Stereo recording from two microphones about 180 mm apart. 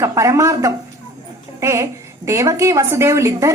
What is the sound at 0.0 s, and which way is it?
A woman's voice, 15° right (ahead or behind).